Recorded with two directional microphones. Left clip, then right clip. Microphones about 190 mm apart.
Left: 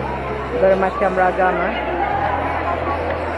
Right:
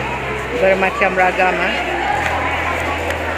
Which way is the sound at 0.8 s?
30° right (ahead or behind).